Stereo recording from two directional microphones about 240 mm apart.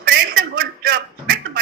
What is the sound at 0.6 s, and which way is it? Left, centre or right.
A man's voice, right.